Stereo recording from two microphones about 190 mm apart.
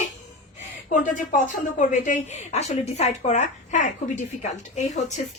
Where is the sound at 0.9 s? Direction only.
40° left (ahead or behind).